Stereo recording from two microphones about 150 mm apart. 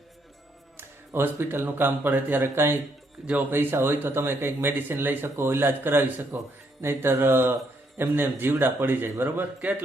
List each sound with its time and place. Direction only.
0.8 s speech: 15° right (ahead or behind)